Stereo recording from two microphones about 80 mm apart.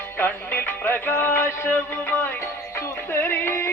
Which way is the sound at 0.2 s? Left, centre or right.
Left.